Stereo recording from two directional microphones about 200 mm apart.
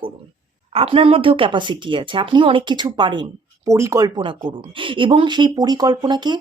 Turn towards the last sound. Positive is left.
turn(degrees=-20)  # may be behind; listen again after turning